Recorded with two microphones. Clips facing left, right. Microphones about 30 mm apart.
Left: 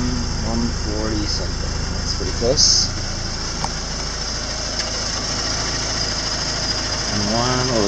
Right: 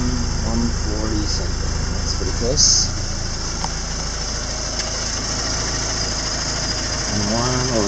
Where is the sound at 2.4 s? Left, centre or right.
Left.